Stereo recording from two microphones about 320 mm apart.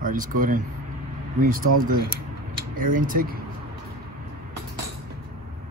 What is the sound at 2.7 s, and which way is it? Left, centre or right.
Speech, right.